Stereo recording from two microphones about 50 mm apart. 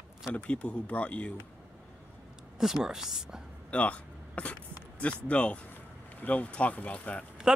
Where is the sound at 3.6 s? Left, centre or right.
Left.